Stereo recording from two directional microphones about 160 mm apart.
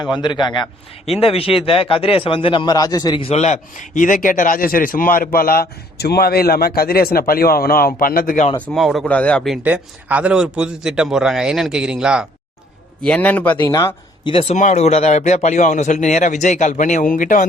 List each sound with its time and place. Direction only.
0.0 s a man's voice: 30° left (ahead or behind)
1.0 s a man's voice: 40° left (ahead or behind)
3.2 s a man's voice: 45° left (ahead or behind); by 8.4 s 60° left (ahead or behind)
8.6 s a man's voice: centre (ahead or behind)
9.6 s a man's voice: 10° right (ahead or behind)
13.1 s a man's voice: 10° left (ahead or behind)
14.3 s a man's voice: 35° left (ahead or behind)
14.5 s a man's voice: 45° left (ahead or behind)